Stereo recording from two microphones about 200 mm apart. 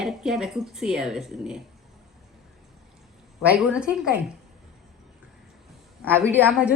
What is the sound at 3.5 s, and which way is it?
Speech, 5° right (ahead or behind).